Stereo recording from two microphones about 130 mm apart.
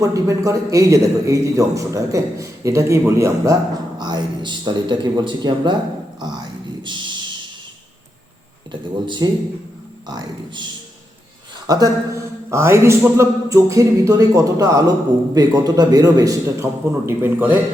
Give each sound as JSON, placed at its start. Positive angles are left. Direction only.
{"t": 0.0, "sound": "a man's voice", "side_deg": -25}
{"t": 8.7, "sound": "speech", "side_deg": -35}
{"t": 11.6, "sound": "a man's voice", "side_deg": -30}
{"t": 17.1, "sound": "speech", "side_deg": -15}